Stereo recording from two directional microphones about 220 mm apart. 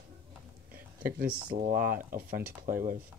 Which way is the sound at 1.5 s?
40° right (ahead or behind).